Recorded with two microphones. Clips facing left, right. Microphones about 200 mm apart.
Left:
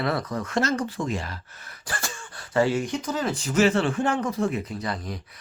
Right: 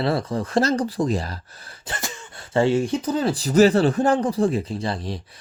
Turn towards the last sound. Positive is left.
turn(degrees=-30)  # may be behind; listen again after turning